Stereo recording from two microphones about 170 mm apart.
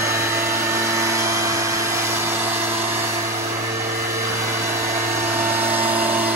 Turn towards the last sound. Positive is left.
turn(degrees=-10)  # may be behind; listen again after turning